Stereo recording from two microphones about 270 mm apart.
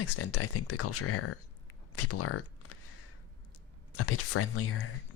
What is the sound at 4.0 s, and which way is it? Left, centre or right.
Speech, left.